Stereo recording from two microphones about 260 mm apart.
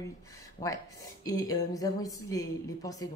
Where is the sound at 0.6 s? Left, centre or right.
Left.